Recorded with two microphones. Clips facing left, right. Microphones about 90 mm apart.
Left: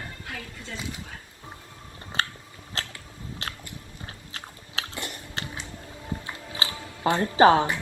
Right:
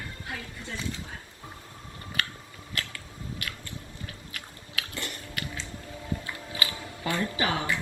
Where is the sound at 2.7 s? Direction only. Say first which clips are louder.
Left 1 dB; 30° left (ahead or behind).